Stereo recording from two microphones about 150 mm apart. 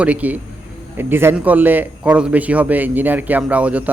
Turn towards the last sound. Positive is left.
turn(degrees=-10)  # may be behind; listen again after turning